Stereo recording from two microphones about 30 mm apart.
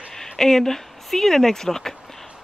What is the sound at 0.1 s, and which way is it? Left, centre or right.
Speech, centre.